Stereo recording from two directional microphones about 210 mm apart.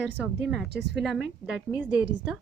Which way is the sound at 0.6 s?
55° right (ahead or behind).